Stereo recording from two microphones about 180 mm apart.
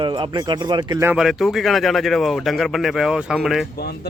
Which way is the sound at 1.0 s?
5° right (ahead or behind).